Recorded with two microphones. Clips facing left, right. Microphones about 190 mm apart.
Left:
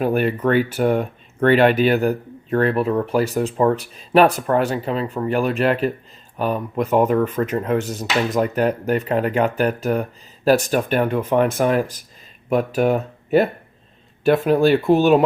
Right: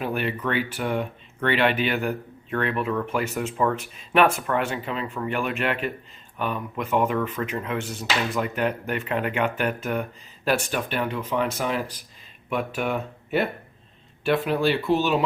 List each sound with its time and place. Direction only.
0.0 s speech: 45° left (ahead or behind)